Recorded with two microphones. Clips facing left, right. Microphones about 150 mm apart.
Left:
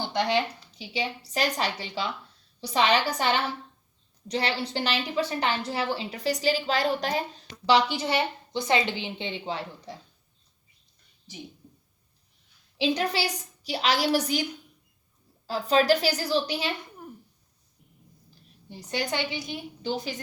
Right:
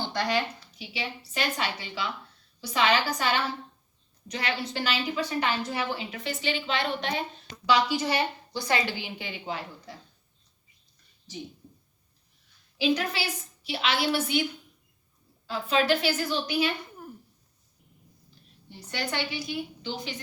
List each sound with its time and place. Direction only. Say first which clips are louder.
0.0 s a woman's voice: left 2 dB; 20° left (ahead or behind); by 2.0 s 35° left (ahead or behind)
2.8 s a woman's voice: left 1 dB; 15° left (ahead or behind)
4.3 s a woman's voice: left 3 dB; 35° left (ahead or behind)
7.7 s a woman's voice: left 2 dB; 25° left (ahead or behind)
12.7 s a woman's voice: left 1 dB; 35° left (ahead or behind)
15.4 s a woman's voice: left 3 dB; 35° left (ahead or behind)
18.7 s a woman's voice: left 3 dB; 15° left (ahead or behind)